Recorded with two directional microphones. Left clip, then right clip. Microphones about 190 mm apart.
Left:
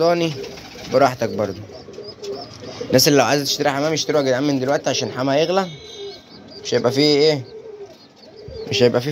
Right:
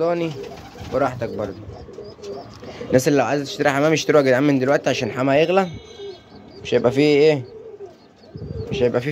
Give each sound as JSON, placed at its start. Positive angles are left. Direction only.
{"t": 0.0, "sound": "speech", "side_deg": 5}
{"t": 0.9, "sound": "speech", "side_deg": 15}
{"t": 2.9, "sound": "speech", "side_deg": -10}
{"t": 3.5, "sound": "speech", "side_deg": -25}
{"t": 3.8, "sound": "speech", "side_deg": -40}
{"t": 6.7, "sound": "speech", "side_deg": -20}
{"t": 8.6, "sound": "bird", "side_deg": 15}